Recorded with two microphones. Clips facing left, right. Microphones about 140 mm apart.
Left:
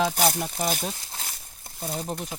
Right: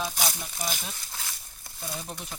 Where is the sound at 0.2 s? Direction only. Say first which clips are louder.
Left 8 dB; 55° left (ahead or behind).